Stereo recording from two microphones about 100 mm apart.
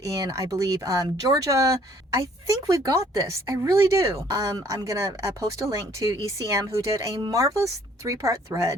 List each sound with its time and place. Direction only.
0.1 s speech: 35° right (ahead or behind)